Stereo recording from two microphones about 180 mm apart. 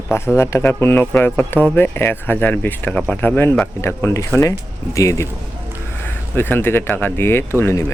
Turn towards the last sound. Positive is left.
turn(degrees=15)  # may be behind; listen again after turning